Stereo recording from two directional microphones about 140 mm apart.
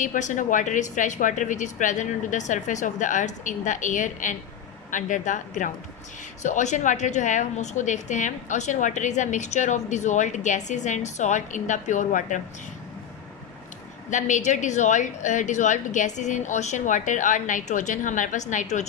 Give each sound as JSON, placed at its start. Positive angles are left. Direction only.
{"t": 0.0, "sound": "a woman's voice", "side_deg": 65}
{"t": 14.1, "sound": "a woman's voice", "side_deg": 60}